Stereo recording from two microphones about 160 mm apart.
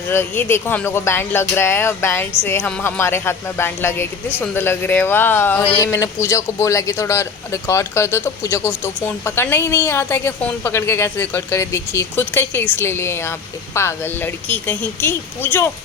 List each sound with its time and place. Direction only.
0.1 s speech: 15° left (ahead or behind)